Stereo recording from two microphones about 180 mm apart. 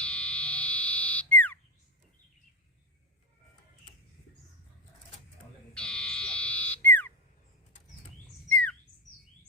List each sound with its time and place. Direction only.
0.0 s fire alarm: 5° left (ahead or behind)
5.7 s fire alarm: 5° left (ahead or behind)
8.4 s bird: 10° left (ahead or behind)